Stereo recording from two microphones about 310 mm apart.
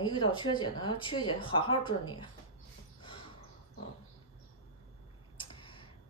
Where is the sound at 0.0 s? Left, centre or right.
Centre.